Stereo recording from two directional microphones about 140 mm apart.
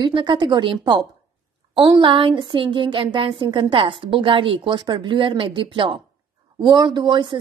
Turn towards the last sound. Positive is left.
turn(degrees=-35)  # may be behind; listen again after turning